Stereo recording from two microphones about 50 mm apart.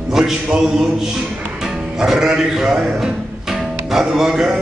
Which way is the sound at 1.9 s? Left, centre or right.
Centre.